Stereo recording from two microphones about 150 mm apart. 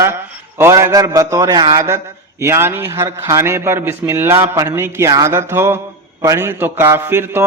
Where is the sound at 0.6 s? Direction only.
20° right (ahead or behind).